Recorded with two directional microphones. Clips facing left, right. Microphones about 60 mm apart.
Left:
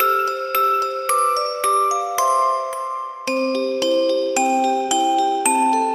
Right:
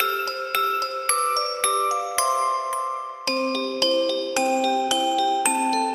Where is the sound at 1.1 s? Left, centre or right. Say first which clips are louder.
Left 5 dB; left.